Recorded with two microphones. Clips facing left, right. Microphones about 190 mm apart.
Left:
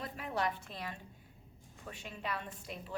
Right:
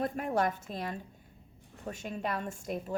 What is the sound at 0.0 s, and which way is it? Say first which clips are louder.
A woman's voice: right 7 dB; 50° right (ahead or behind).